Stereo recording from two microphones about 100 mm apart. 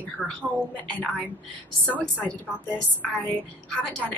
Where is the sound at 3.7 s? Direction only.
10° left (ahead or behind).